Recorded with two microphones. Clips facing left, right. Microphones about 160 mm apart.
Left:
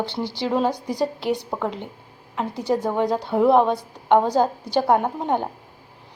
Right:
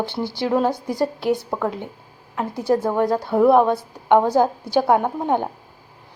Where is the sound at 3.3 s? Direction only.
Centre (ahead or behind).